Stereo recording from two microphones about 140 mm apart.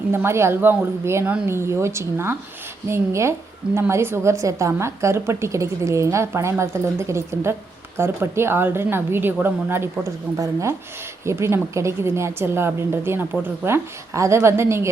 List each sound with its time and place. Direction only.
0.1 s a woman's voice: 20° right (ahead or behind)